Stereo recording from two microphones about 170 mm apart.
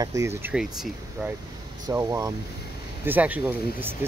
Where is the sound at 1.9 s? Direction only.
20° right (ahead or behind).